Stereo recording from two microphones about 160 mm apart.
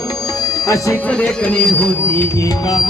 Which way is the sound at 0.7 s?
20° left (ahead or behind).